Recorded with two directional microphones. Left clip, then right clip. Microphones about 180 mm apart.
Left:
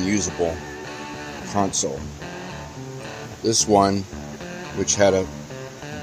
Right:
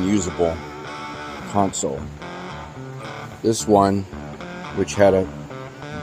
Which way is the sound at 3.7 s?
15° right (ahead or behind).